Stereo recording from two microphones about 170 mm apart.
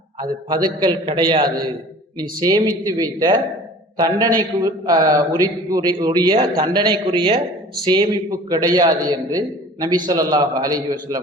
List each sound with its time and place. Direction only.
0.2 s a man's voice: 25° right (ahead or behind)